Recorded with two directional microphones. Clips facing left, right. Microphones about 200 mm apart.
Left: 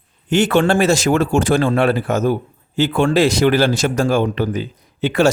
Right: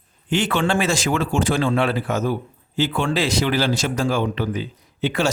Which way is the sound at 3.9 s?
45° left (ahead or behind).